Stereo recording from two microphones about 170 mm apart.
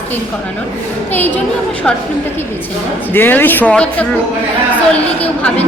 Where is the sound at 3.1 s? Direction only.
10° left (ahead or behind).